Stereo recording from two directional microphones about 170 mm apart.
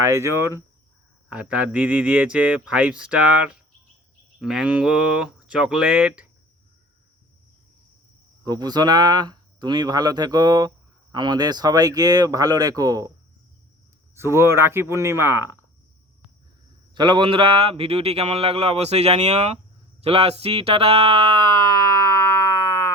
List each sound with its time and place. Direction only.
0.0 s speech: 15° right (ahead or behind)
8.4 s speech: 25° right (ahead or behind)
14.2 s speech: 15° right (ahead or behind)
16.9 s speech: 25° right (ahead or behind)